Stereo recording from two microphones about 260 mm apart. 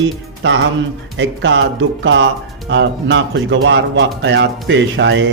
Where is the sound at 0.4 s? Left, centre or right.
Right.